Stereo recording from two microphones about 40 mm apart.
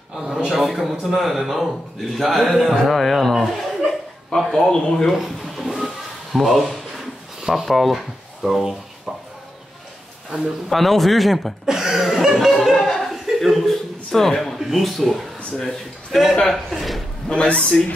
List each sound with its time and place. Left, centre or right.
0.1 s a man's voice: centre
4.5 s speech: centre
5.7 s a sound: centre
7.4 s speech: centre
10.3 s speech: centre
11.6 s cough: centre
12.8 s chuckle: centre
14.6 s a man's voice: centre
16.7 s a sound: centre
17.3 s a man's voice: left